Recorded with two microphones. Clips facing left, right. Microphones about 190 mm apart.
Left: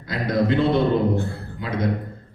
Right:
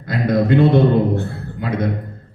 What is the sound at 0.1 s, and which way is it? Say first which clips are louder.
Speech: right 5 dB; 55° right (ahead or behind).